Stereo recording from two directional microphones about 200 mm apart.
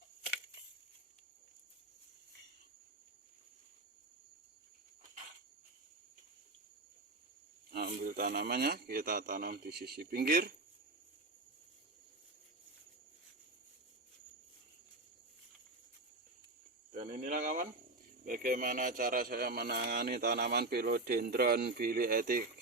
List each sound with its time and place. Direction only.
7.7 s a man's voice: 50° right (ahead or behind)
16.9 s cricket: 40° right (ahead or behind)
18.3 s a man's voice: 40° right (ahead or behind)